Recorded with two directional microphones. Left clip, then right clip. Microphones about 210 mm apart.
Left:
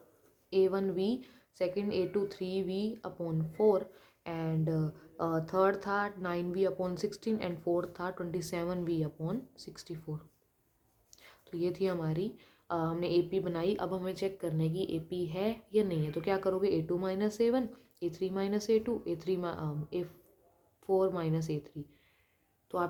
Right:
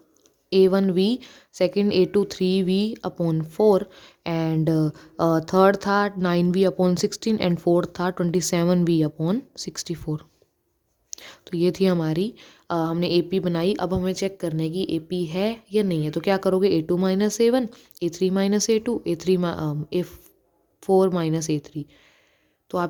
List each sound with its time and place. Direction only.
0.5 s a woman's voice: 55° right (ahead or behind)